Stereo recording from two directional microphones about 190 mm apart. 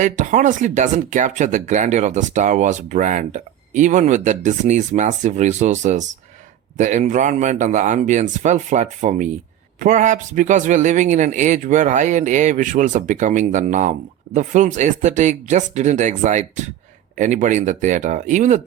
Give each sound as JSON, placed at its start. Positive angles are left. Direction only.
{"t": 0.0, "sound": "speech", "side_deg": -40}